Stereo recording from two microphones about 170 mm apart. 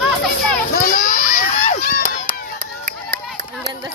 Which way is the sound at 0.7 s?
50° left (ahead or behind).